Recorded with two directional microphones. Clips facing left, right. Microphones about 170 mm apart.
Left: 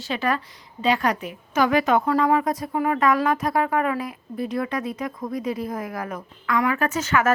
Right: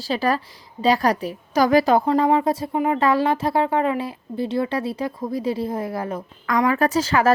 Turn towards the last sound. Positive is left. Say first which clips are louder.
# right 3 dB
turn(degrees=-35)  # may be behind; listen again after turning